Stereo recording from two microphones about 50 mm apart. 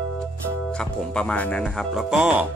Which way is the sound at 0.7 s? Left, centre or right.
Centre.